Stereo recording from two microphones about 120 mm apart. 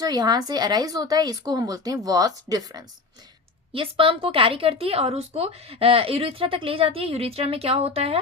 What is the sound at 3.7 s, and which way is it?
Speech, 50° right (ahead or behind).